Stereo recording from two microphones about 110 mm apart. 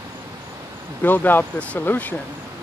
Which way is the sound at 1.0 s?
15° left (ahead or behind).